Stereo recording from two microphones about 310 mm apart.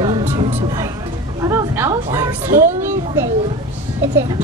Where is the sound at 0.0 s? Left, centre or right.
Centre.